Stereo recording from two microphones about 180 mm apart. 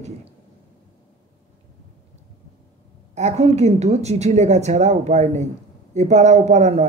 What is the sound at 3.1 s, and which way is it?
A woman's voice, 40° right (ahead or behind).